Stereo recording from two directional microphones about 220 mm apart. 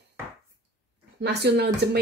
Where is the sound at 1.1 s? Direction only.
50° right (ahead or behind).